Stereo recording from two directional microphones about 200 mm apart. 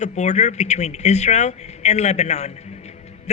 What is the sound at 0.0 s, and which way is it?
A man's voice, 35° left (ahead or behind).